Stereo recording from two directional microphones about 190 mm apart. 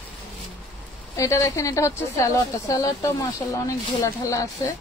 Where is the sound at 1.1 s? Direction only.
15° left (ahead or behind).